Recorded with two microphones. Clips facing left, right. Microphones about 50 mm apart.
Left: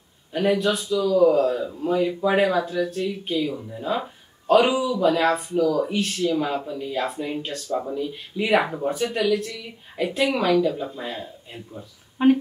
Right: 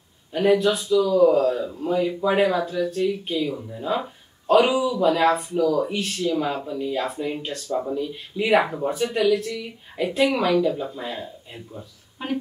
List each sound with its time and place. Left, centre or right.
0.3 s speech: centre
12.2 s speech: left